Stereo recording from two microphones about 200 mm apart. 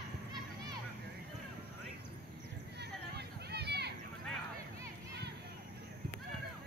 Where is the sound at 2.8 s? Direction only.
55° right (ahead or behind).